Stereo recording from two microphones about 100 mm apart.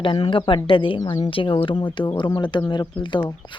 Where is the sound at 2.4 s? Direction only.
50° left (ahead or behind).